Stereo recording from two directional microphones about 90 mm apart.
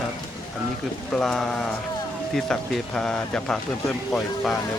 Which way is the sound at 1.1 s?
5° left (ahead or behind).